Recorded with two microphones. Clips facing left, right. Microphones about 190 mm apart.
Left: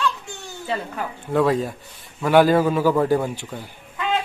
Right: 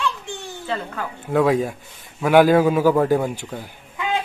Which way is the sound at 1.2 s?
5° right (ahead or behind).